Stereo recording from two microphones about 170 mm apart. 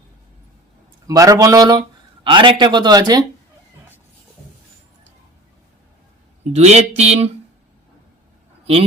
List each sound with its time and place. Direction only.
1.0 s speech: 20° right (ahead or behind)
6.5 s speech: 40° right (ahead or behind)